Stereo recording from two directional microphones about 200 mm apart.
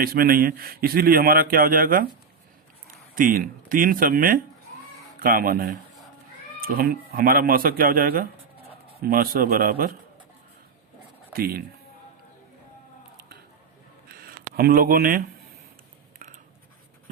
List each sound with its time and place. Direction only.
0.0 s a man's voice: 45° right (ahead or behind)
3.2 s a man's voice: 45° right (ahead or behind)
11.3 s a man's voice: 50° right (ahead or behind)
14.1 s a sound: 50° right (ahead or behind)